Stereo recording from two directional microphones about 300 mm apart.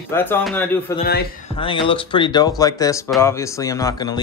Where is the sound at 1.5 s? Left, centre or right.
Centre.